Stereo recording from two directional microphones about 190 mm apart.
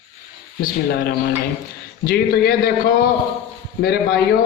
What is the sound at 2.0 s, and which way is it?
Speech, 50° left (ahead or behind).